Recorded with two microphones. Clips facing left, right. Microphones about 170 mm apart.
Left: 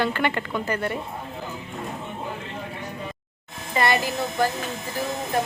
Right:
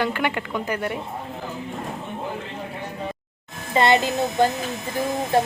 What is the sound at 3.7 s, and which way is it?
Speech, 20° right (ahead or behind).